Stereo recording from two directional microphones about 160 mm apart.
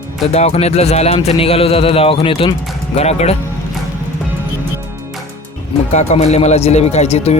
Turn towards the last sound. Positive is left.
turn(degrees=40)  # may be behind; listen again after turning